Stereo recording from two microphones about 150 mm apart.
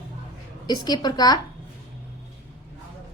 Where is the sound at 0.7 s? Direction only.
25° left (ahead or behind).